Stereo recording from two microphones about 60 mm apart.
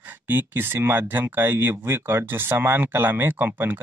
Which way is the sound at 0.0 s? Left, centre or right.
Right.